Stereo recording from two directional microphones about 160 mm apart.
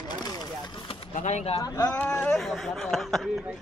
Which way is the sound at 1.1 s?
45° left (ahead or behind).